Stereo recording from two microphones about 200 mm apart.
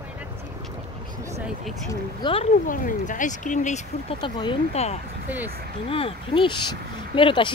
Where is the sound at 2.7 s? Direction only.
40° left (ahead or behind).